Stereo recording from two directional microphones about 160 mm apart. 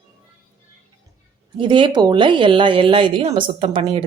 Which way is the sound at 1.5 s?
30° right (ahead or behind).